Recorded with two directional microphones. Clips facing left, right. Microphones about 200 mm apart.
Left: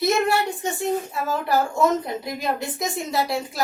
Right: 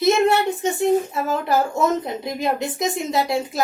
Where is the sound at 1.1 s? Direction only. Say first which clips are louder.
Right 2 dB; 20° right (ahead or behind).